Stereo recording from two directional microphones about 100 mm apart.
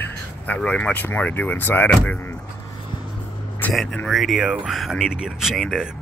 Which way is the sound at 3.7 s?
5° left (ahead or behind).